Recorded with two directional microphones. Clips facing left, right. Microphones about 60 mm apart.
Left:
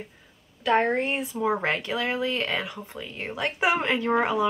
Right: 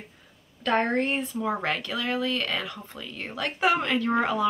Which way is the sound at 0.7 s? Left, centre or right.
Centre.